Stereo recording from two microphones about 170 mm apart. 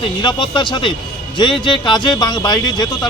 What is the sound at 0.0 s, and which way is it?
Speech, 25° left (ahead or behind).